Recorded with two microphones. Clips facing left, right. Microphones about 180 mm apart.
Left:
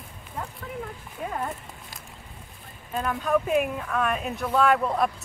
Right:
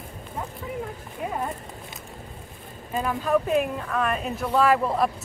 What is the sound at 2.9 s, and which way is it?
Speech, centre (ahead or behind).